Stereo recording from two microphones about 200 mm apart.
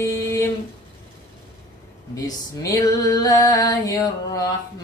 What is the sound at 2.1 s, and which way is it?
Female singing, 15° left (ahead or behind).